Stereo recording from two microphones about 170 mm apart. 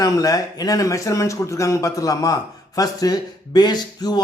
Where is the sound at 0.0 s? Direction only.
20° left (ahead or behind).